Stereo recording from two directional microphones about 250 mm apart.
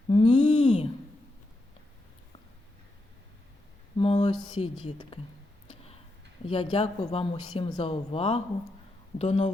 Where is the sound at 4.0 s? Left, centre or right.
Left.